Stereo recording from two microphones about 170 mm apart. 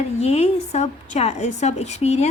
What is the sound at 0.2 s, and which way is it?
A woman's voice, 40° left (ahead or behind).